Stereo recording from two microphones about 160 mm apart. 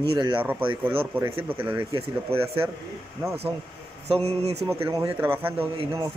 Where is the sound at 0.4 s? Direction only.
10° right (ahead or behind).